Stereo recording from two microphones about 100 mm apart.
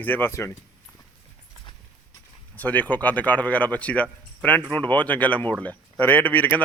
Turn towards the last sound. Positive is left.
turn(degrees=15)  # may be behind; listen again after turning